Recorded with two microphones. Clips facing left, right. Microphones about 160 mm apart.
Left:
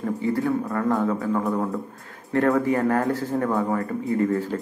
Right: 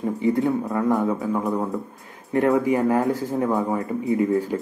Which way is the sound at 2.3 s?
15° right (ahead or behind).